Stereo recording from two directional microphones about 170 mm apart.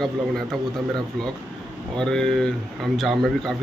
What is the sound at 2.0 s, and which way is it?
Speech, 5° left (ahead or behind).